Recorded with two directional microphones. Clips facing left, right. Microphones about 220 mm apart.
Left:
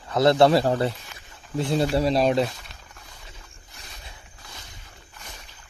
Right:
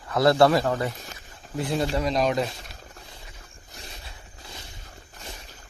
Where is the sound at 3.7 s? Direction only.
30° right (ahead or behind).